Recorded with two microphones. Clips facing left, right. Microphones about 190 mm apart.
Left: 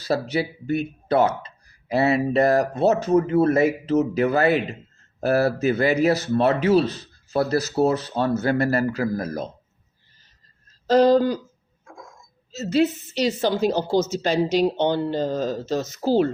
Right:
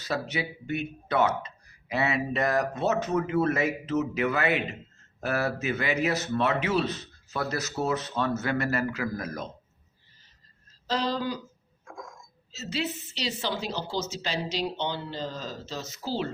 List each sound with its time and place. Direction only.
0.0 s a man's voice: 35° left (ahead or behind)
10.8 s a woman's voice: 50° left (ahead or behind)
12.5 s a woman's voice: 45° left (ahead or behind)